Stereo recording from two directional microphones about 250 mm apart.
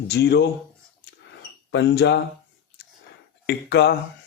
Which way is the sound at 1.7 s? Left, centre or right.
Left.